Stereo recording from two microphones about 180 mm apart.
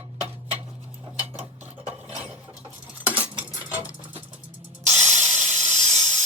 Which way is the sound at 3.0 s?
10° right (ahead or behind).